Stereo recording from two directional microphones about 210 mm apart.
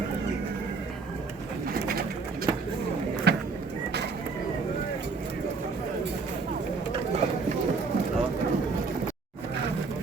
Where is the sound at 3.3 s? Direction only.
50° right (ahead or behind).